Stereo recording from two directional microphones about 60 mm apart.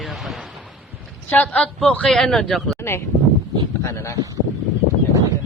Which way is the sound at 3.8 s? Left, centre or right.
Left.